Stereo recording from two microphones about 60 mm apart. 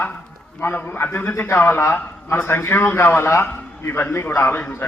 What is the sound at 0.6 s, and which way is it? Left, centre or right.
A man's voice, left.